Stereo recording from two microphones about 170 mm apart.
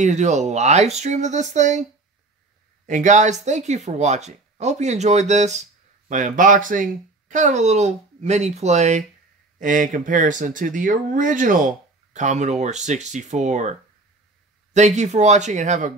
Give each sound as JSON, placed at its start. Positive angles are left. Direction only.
{"t": 0.0, "sound": "speech", "side_deg": -45}
{"t": 2.9, "sound": "speech", "side_deg": -45}